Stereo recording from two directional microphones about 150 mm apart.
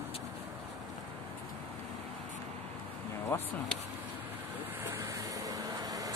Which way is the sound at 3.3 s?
15° left (ahead or behind).